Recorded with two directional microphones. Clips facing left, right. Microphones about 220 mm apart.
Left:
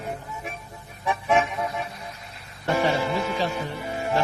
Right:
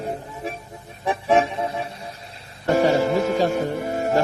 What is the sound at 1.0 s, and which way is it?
Music, 30° right (ahead or behind).